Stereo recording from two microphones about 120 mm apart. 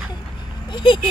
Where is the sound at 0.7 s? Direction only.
45° left (ahead or behind).